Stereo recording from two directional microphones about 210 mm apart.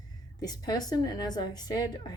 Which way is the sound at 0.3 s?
20° left (ahead or behind).